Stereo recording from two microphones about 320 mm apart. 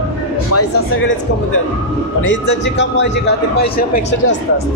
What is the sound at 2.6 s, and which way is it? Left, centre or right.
A man's voice, left.